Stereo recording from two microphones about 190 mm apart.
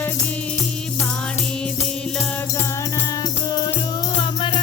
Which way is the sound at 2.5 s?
15° left (ahead or behind).